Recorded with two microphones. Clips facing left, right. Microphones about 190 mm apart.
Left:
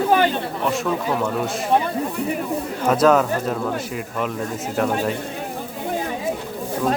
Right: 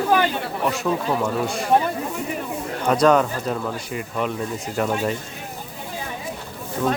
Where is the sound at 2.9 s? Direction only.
5° left (ahead or behind).